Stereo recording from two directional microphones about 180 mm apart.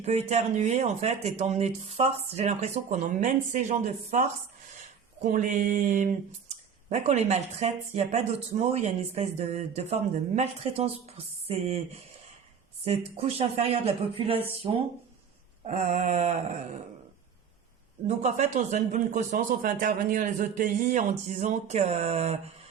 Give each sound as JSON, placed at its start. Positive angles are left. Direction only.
{"t": 0.0, "sound": "speech", "side_deg": -35}
{"t": 18.0, "sound": "speech", "side_deg": -40}